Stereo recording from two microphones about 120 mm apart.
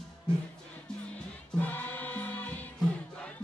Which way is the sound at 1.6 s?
15° left (ahead or behind).